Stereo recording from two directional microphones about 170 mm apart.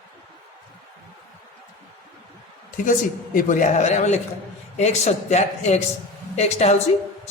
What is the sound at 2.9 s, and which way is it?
A man's voice, 50° left (ahead or behind).